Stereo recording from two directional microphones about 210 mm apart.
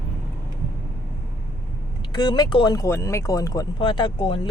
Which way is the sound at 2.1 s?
20° left (ahead or behind).